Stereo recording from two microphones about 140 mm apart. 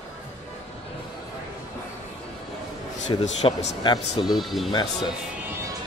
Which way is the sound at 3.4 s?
35° left (ahead or behind).